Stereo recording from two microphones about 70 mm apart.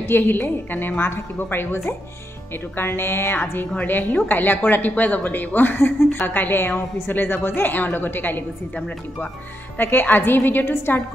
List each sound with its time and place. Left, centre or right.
0.0 s a woman's voice: left
9.8 s a woman's voice: left